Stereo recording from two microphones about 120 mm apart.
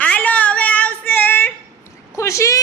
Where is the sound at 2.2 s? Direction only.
25° left (ahead or behind).